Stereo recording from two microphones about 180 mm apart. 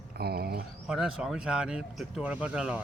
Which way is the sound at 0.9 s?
5° right (ahead or behind).